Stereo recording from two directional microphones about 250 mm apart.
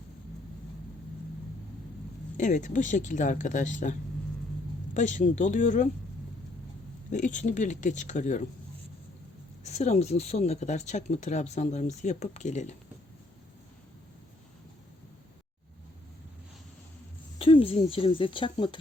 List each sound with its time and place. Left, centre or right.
2.4 s speech: left
4.9 s speech: left
7.1 s speech: left
9.6 s speech: left
17.3 s a woman's voice: left